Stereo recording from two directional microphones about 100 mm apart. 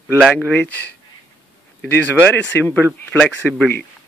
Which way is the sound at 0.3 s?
15° left (ahead or behind).